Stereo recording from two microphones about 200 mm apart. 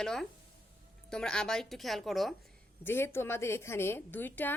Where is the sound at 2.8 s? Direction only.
10° left (ahead or behind).